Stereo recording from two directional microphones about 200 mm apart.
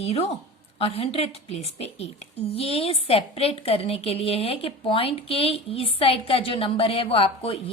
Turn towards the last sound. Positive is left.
turn(degrees=25)  # may be behind; listen again after turning